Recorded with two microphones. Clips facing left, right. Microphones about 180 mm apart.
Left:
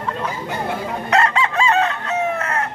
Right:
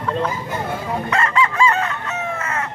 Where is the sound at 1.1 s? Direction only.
70° left (ahead or behind).